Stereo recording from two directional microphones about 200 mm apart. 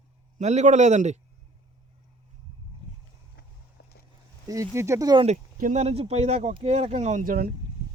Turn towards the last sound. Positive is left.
turn(degrees=-45)  # may be behind; listen again after turning